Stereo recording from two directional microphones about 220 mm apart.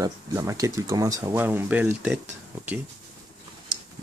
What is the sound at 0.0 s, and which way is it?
Speech, 15° right (ahead or behind).